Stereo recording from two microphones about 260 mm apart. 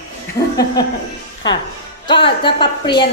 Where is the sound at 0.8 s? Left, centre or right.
Centre.